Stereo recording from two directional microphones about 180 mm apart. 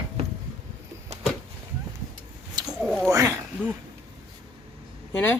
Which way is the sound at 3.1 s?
15° right (ahead or behind).